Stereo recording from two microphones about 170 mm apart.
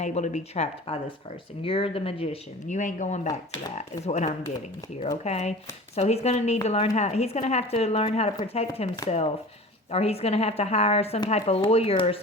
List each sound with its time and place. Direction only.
0.0 s speech: 40° left (ahead or behind)